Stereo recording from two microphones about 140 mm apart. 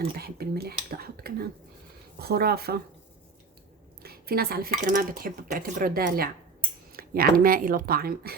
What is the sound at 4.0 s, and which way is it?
Speech, 90° right.